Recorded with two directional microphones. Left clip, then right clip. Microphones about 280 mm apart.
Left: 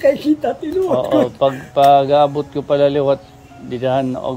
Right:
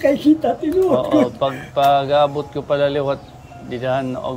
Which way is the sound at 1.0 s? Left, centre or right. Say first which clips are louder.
Left 2 dB; left.